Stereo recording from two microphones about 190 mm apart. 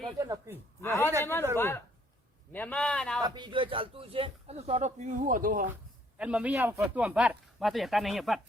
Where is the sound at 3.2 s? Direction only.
25° right (ahead or behind); by 5.6 s 45° right (ahead or behind).